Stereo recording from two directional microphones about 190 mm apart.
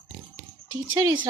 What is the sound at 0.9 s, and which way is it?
Speech, 25° right (ahead or behind).